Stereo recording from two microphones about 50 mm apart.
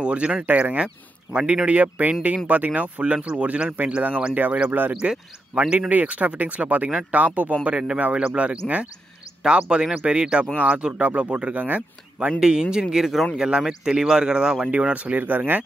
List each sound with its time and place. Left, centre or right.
0.0 s speech: right
4.3 s speech: right
5.5 s speech: right
5.9 s speech: right
12.3 s speech: centre; by 15.6 s right